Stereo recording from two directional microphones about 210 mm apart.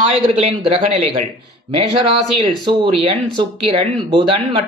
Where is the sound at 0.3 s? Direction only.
35° right (ahead or behind).